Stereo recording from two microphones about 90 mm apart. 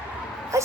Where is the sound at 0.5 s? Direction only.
35° right (ahead or behind).